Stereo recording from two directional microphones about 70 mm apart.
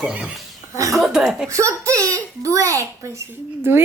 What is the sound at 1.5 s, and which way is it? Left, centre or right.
A child's voice, right.